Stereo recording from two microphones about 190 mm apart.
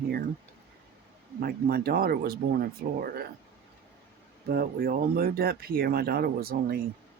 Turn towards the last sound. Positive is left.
turn(degrees=-55)  # may be behind; listen again after turning